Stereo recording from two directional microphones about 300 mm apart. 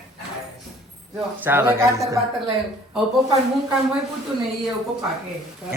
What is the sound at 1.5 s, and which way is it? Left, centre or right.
Speech, centre.